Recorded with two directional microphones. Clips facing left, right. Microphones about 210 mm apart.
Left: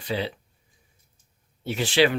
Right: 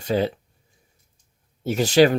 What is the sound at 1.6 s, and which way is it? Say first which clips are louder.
Speech: right 5 dB; 40° right (ahead or behind).